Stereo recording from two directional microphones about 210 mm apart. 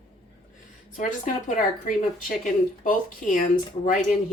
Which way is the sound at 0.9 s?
35° left (ahead or behind).